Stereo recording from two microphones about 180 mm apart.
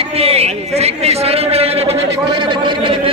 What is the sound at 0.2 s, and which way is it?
A man's voice, 35° right (ahead or behind).